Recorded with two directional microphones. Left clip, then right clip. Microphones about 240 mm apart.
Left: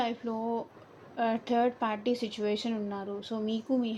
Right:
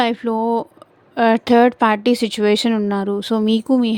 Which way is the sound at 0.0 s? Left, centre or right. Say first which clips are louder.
Right 14 dB; right.